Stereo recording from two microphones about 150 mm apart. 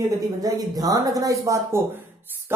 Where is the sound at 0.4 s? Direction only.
25° right (ahead or behind).